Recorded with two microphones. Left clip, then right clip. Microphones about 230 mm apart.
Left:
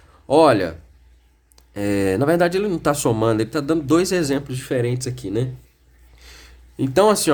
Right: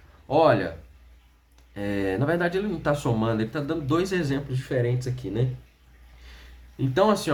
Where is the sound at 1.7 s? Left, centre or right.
Left.